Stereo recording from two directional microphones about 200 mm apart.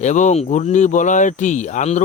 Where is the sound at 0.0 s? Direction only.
35° left (ahead or behind).